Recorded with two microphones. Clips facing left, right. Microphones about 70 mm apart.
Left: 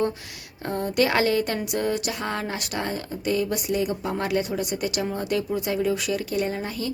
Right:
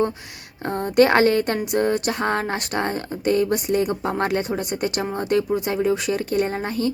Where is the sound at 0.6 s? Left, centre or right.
Right.